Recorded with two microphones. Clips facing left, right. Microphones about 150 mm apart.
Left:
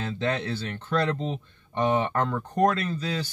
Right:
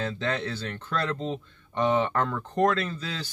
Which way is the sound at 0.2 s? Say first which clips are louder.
Left 2 dB; 15° left (ahead or behind).